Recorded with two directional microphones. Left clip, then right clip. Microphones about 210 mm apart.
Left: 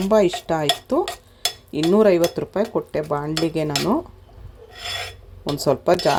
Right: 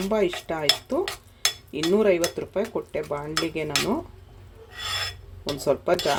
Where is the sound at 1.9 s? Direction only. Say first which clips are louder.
Left 5 dB; 25° left (ahead or behind).